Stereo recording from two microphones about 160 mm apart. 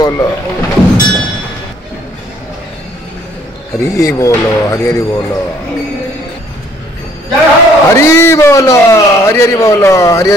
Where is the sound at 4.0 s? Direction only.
20° left (ahead or behind).